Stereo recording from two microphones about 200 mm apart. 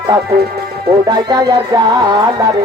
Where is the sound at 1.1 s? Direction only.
20° right (ahead or behind).